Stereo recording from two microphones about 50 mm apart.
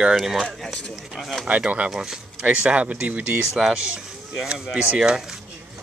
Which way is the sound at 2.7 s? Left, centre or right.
Right.